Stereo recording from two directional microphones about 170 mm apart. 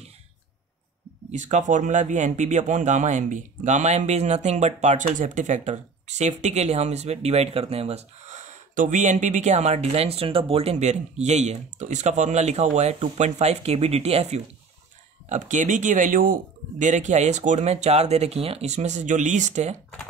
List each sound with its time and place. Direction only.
1.3 s speech: 45° right (ahead or behind)